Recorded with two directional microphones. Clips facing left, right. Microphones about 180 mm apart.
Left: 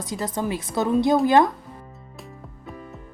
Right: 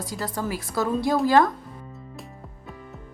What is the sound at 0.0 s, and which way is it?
A woman's voice, 20° left (ahead or behind).